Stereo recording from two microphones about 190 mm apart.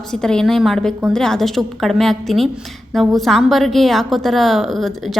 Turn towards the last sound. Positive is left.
turn(degrees=0)  # may be behind; listen again after turning